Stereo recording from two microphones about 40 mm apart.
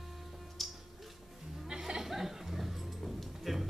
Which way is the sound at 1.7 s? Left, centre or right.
Centre.